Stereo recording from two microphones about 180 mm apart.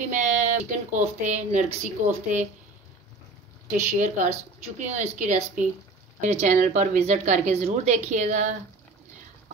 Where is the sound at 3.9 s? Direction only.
45° right (ahead or behind).